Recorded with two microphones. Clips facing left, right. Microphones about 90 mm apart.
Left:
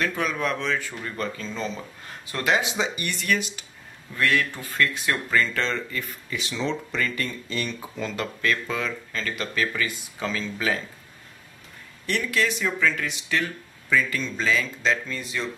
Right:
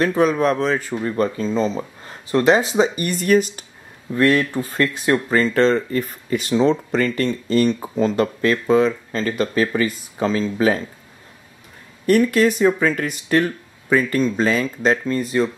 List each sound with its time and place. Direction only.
0.0 s speech: 35° right (ahead or behind)
12.1 s speech: 45° right (ahead or behind)